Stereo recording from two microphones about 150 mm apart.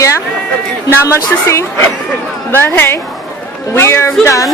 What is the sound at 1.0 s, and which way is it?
Speech, 20° left (ahead or behind).